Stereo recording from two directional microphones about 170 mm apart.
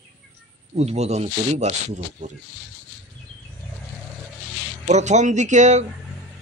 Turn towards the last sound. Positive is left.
turn(degrees=-45)  # may be behind; listen again after turning